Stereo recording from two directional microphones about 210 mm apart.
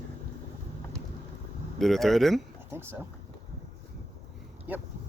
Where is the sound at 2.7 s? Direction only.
10° right (ahead or behind).